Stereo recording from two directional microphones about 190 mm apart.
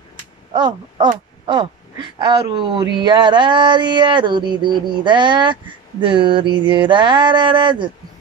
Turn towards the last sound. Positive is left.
turn(degrees=-25)  # may be behind; listen again after turning